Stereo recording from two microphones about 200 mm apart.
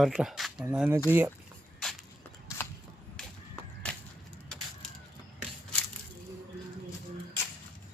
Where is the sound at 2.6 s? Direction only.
10° left (ahead or behind).